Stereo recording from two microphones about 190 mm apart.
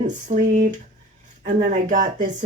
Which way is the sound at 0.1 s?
40° right (ahead or behind).